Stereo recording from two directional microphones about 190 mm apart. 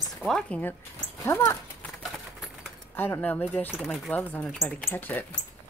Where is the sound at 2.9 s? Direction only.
10° left (ahead or behind).